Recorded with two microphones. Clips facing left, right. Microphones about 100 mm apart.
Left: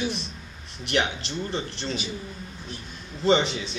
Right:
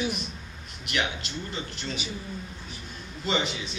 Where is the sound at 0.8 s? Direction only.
30° left (ahead or behind).